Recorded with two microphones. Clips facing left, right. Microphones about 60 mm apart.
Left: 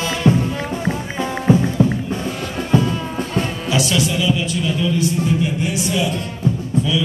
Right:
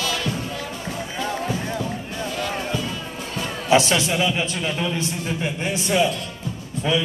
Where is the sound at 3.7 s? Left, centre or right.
Right.